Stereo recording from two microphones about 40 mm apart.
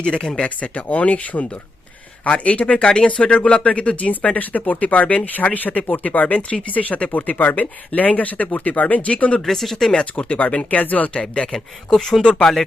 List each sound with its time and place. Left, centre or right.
0.0 s speech: left
0.4 s speech: left
9.5 s speech: centre
9.9 s speech: left
11.1 s speech: left
11.5 s speech: centre
12.2 s speech: left